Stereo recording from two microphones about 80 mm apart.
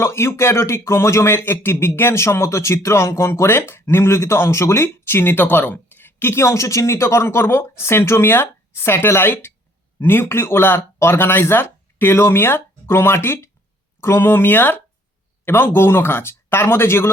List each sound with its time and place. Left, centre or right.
0.0 s speech: left